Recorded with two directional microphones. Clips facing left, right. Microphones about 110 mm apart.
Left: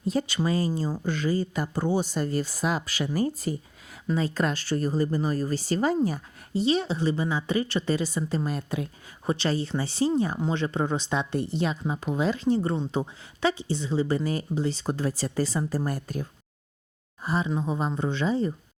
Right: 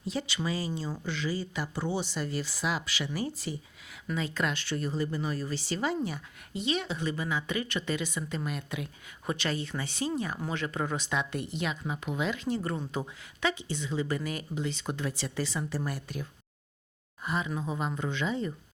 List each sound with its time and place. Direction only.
0.0 s speech: 45° left (ahead or behind)
4.0 s speech: 35° left (ahead or behind)
17.2 s speech: 30° left (ahead or behind)